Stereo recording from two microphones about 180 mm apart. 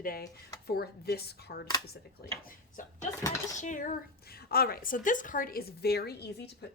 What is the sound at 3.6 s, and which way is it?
Speech, 45° left (ahead or behind).